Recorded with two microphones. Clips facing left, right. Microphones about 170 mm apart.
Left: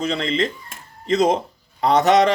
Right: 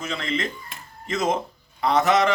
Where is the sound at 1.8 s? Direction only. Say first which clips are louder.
Left 4 dB; 35° left (ahead or behind).